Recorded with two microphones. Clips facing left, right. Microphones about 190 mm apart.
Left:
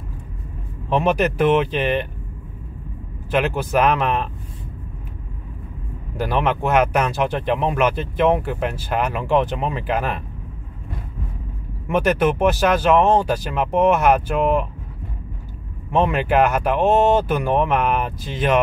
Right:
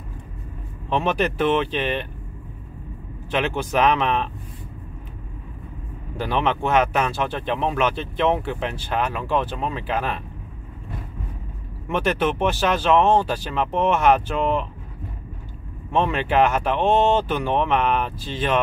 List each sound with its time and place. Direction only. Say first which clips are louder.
0.8 s speech: left 3 dB; 10° left (ahead or behind)
3.3 s speech: left 3 dB; 10° left (ahead or behind)
6.1 s speech: left 2 dB; 10° left (ahead or behind)
11.9 s speech: left 4 dB; 10° left (ahead or behind)
15.9 s speech: left 3 dB; 10° left (ahead or behind)